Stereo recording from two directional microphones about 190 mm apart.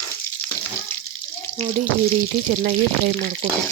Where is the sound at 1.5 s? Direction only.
35° right (ahead or behind).